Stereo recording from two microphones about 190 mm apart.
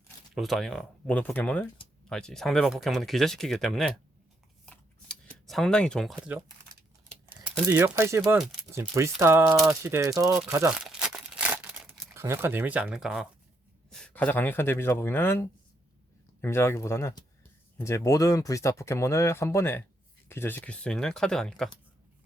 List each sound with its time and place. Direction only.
0.3 s speech: centre (ahead or behind)
4.6 s a sound: 5° left (ahead or behind)
6.1 s speech: 5° right (ahead or behind)
10.3 s crumpling: 10° right (ahead or behind)
12.1 s speech: 15° right (ahead or behind); by 21.7 s 5° left (ahead or behind)